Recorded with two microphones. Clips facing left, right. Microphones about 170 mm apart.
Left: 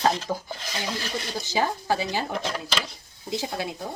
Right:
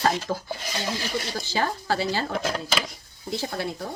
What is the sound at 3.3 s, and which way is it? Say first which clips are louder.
Speech: even; 15° left (ahead or behind).